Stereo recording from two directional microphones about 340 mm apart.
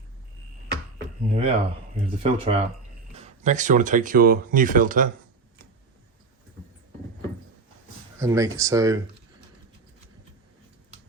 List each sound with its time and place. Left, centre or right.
0.9 s a sound: centre
2.2 s speech: centre
8.2 s speech: centre